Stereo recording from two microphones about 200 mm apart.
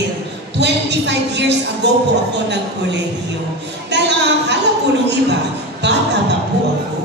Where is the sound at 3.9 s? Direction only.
60° right (ahead or behind).